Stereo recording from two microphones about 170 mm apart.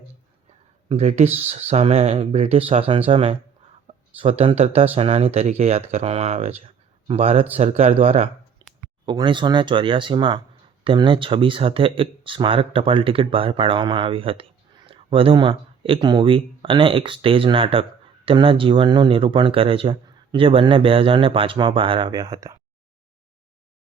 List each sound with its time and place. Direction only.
0.9 s speech: 40° right (ahead or behind)
8.6 s a sound: 25° right (ahead or behind)
9.0 s speech: 30° right (ahead or behind)